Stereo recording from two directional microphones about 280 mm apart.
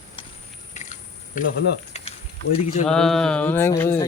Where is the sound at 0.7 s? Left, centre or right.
Left.